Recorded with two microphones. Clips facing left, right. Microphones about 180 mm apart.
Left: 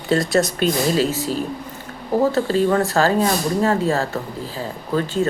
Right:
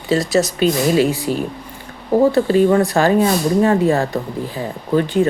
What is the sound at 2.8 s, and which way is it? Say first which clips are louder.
Speech: right 3 dB; 15° right (ahead or behind).